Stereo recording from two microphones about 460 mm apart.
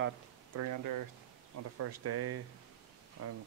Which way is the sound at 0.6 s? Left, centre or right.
Right.